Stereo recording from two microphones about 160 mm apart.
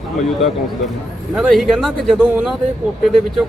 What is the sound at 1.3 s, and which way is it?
A man's voice, centre (ahead or behind).